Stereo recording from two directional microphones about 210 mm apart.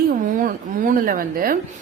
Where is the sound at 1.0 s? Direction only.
40° right (ahead or behind).